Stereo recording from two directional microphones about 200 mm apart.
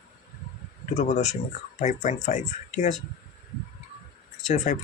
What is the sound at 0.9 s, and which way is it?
Speech, 35° left (ahead or behind).